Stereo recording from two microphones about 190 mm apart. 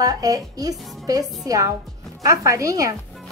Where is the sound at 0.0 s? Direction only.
20° right (ahead or behind).